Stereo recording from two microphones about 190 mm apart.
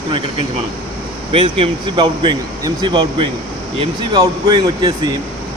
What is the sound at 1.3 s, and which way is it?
Speech, 30° right (ahead or behind).